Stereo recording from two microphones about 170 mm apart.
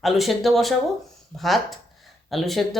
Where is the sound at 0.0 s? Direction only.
Centre (ahead or behind).